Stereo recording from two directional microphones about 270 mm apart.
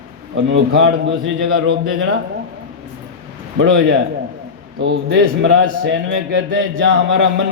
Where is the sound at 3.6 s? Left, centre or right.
Right.